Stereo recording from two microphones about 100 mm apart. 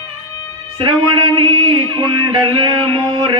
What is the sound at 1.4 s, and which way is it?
Music, 60° right (ahead or behind).